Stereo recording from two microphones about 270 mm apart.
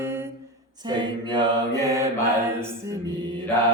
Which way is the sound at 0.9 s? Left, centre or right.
Centre.